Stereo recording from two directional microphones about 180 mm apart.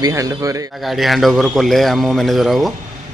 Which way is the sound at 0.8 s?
Centre (ahead or behind).